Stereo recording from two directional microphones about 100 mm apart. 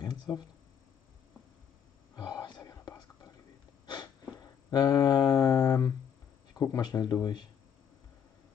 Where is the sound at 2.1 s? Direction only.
40° left (ahead or behind).